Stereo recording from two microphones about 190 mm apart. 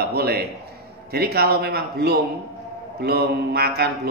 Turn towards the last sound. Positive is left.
turn(degrees=-55)  # may be behind; listen again after turning